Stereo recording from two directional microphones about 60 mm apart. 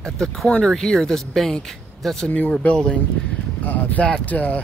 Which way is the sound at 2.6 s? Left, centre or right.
Left.